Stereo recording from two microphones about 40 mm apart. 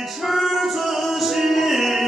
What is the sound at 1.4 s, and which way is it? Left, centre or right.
Music, centre.